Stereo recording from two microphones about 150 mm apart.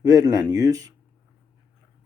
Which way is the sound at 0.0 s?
25° right (ahead or behind).